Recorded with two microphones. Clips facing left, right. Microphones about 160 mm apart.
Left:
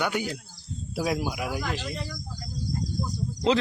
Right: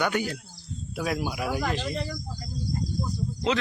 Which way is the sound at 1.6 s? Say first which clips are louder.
Right 3 dB; 45° right (ahead or behind).